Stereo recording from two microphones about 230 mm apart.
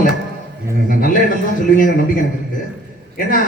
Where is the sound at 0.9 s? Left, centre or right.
Left.